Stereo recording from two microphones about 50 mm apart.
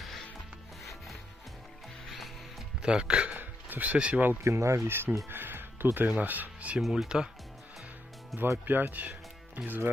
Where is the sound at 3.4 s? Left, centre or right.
Right.